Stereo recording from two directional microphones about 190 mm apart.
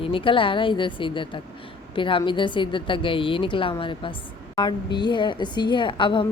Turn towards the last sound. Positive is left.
turn(degrees=25)  # may be behind; listen again after turning